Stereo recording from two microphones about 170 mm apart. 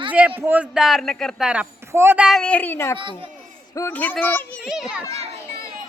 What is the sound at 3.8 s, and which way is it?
Speech, 10° left (ahead or behind).